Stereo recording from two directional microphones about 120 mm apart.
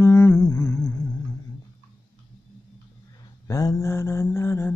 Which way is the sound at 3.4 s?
30° left (ahead or behind).